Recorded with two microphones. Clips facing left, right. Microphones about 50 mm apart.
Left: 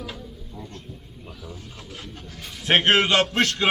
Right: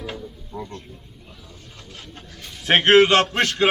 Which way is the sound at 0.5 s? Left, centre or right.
Right.